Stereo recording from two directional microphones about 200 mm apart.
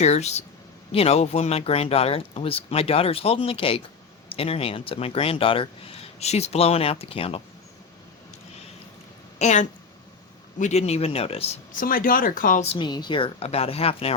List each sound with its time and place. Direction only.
0.0 s speech: 35° left (ahead or behind)
9.4 s speech: 35° left (ahead or behind)
11.7 s speech: 45° left (ahead or behind)